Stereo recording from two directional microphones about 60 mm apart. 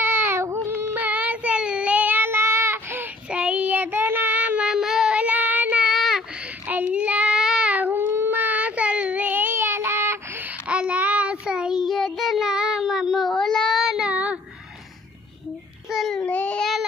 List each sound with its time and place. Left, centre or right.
0.0 s child singing: right
3.3 s child singing: centre
4.6 s child singing: centre
5.2 s child singing: right
5.8 s child singing: centre
6.7 s child singing: right
7.7 s child singing: right
10.7 s child singing: centre
11.5 s a sound: centre
11.8 s child singing: centre
13.8 s child singing: centre
15.9 s child singing: centre
16.2 s child singing: left